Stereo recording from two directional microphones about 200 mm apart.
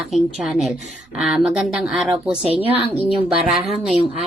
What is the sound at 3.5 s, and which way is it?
Speech, 30° right (ahead or behind).